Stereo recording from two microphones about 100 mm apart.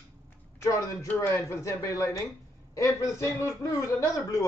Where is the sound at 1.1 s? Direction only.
30° left (ahead or behind).